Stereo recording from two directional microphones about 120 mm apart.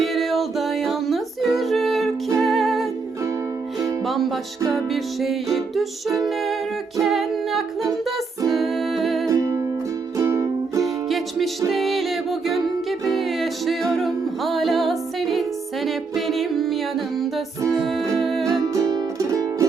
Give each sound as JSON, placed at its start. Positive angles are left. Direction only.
{"t": 0.0, "sound": "music", "side_deg": 0}
{"t": 4.0, "sound": "music", "side_deg": 0}
{"t": 9.3, "sound": "music", "side_deg": -25}
{"t": 11.7, "sound": "music", "side_deg": 0}
{"t": 18.7, "sound": "music", "side_deg": -25}